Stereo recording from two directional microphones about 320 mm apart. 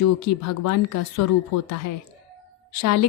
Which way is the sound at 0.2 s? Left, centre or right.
Left.